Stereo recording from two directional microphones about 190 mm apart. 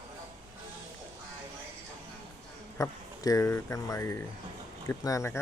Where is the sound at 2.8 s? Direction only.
15° left (ahead or behind).